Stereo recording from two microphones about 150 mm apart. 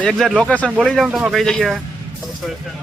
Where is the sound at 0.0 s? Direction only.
Centre (ahead or behind).